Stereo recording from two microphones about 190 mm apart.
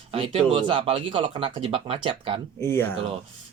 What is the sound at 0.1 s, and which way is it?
Speech, 30° right (ahead or behind).